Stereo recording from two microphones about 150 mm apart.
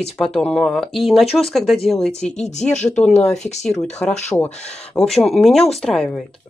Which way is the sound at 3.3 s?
50° left (ahead or behind).